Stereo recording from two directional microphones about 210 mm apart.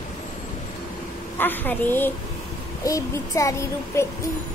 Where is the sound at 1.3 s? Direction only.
10° left (ahead or behind).